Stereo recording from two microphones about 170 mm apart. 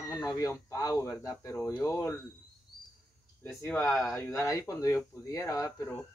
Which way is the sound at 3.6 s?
15° left (ahead or behind).